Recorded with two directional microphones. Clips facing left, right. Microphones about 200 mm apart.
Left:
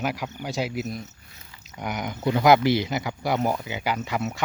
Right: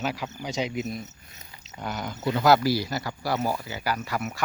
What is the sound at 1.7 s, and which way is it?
Speech, 15° left (ahead or behind).